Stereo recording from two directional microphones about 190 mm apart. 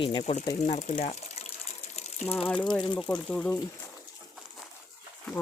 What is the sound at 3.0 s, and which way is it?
Speech, 5° left (ahead or behind).